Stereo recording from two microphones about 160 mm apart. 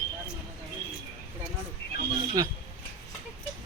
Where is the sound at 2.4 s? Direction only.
25° right (ahead or behind).